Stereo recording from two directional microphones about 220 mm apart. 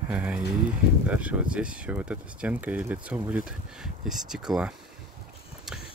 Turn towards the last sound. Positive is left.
turn(degrees=0)  # may be behind; listen again after turning